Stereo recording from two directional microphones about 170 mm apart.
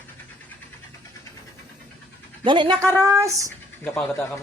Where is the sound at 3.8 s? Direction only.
10° left (ahead or behind).